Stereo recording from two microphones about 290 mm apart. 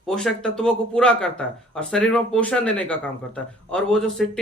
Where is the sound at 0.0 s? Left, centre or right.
Centre.